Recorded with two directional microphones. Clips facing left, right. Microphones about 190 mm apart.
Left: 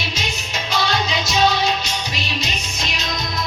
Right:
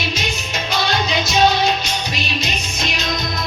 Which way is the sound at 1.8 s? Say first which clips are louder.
Right 2 dB; 30° left (ahead or behind).